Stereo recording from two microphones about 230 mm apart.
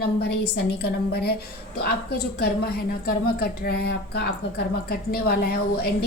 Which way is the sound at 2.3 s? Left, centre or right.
Left.